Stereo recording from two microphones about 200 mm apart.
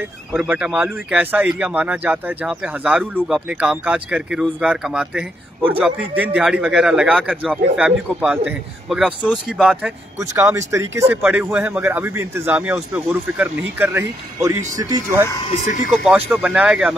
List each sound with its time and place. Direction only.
0.3 s speech: 10° right (ahead or behind)
10.1 s speech: 15° right (ahead or behind)
15.5 s speech: 35° left (ahead or behind)
16.0 s speech: 5° right (ahead or behind)